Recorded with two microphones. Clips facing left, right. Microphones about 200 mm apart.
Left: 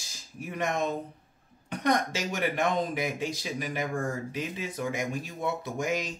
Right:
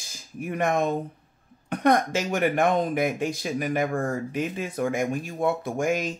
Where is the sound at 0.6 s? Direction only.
55° right (ahead or behind).